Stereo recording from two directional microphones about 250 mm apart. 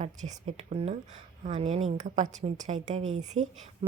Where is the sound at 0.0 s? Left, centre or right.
Right.